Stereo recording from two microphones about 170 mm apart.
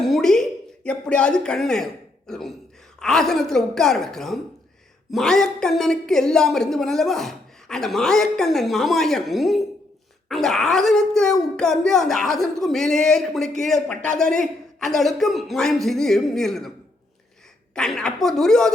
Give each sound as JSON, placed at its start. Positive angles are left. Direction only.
{"t": 0.0, "sound": "a sound", "side_deg": 0}
{"t": 0.9, "sound": "speech", "side_deg": 5}
{"t": 17.7, "sound": "speech", "side_deg": 5}